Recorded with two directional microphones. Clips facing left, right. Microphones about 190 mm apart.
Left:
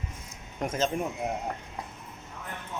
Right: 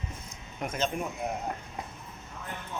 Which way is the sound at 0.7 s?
40° left (ahead or behind).